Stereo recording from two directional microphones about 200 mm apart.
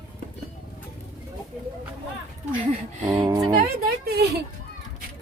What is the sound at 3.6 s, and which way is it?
Speech, 50° right (ahead or behind).